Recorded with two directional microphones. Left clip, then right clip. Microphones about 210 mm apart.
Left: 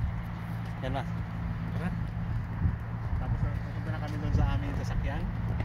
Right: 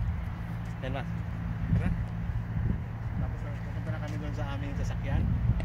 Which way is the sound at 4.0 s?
50° left (ahead or behind).